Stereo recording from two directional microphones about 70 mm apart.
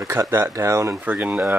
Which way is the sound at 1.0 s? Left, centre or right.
Right.